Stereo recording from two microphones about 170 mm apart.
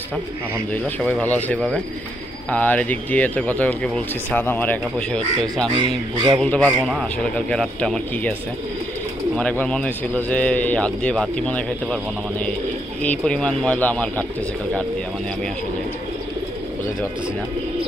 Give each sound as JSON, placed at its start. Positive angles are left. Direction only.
{"t": 0.8, "sound": "speech", "side_deg": 10}
{"t": 5.8, "sound": "speech", "side_deg": -25}
{"t": 6.3, "sound": "speech", "side_deg": 5}
{"t": 9.4, "sound": "speech", "side_deg": 5}